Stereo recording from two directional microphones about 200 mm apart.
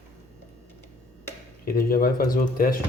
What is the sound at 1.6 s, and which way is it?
Speech, 45° left (ahead or behind).